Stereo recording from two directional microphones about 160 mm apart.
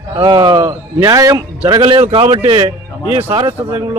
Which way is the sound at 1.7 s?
30° right (ahead or behind).